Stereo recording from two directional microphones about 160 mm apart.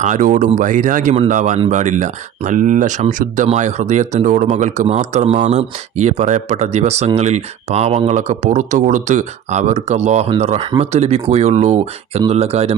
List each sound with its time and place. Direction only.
0.0 s speech: 50° right (ahead or behind)
1.1 s speech: 45° right (ahead or behind)